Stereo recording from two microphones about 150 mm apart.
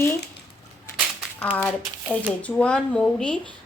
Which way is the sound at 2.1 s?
5° left (ahead or behind).